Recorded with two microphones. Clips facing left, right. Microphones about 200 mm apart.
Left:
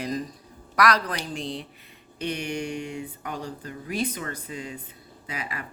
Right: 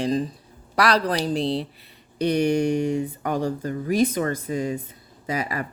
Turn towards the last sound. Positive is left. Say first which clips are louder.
# right 9 dB
turn(degrees=-40)  # may be behind; listen again after turning